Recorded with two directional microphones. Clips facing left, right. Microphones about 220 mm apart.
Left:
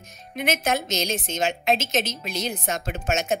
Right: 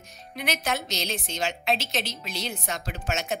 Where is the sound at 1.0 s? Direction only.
20° left (ahead or behind).